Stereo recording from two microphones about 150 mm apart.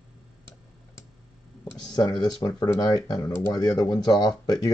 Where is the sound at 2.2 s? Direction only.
25° left (ahead or behind).